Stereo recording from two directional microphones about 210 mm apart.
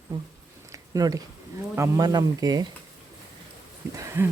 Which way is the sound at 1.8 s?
15° right (ahead or behind).